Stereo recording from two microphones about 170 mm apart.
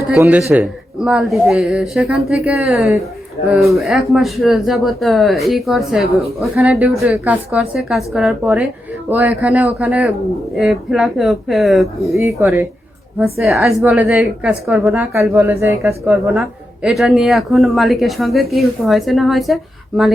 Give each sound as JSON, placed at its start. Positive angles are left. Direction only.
{"t": 0.2, "sound": "speech", "side_deg": -10}
{"t": 12.1, "sound": "speech", "side_deg": -15}
{"t": 13.4, "sound": "speech", "side_deg": 0}
{"t": 15.1, "sound": "speech", "side_deg": -15}
{"t": 16.8, "sound": "speech", "side_deg": 0}